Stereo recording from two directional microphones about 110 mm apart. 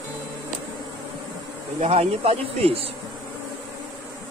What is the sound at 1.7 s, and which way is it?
Speech, 70° right (ahead or behind).